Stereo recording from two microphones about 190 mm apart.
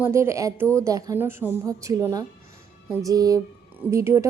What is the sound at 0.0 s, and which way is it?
A woman's voice, 15° right (ahead or behind).